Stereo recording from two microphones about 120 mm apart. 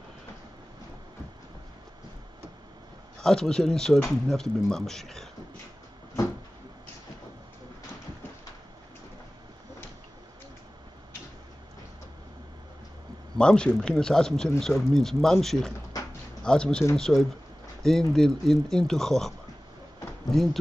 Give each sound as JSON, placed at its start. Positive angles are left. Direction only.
{"t": 3.2, "sound": "speech", "side_deg": 5}
{"t": 13.4, "sound": "speech", "side_deg": 5}